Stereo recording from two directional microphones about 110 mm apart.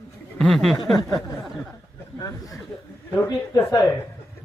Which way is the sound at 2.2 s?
30° left (ahead or behind).